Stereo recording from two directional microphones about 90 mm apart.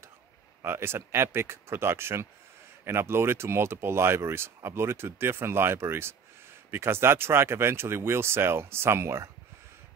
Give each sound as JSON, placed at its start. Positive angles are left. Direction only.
{"t": 0.6, "sound": "speech", "side_deg": -30}